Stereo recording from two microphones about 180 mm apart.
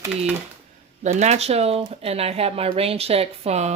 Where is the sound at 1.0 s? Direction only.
40° right (ahead or behind).